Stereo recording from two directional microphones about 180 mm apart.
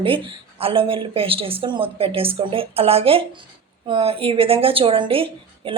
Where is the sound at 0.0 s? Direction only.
30° right (ahead or behind).